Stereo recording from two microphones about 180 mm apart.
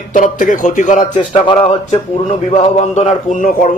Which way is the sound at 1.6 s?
40° left (ahead or behind).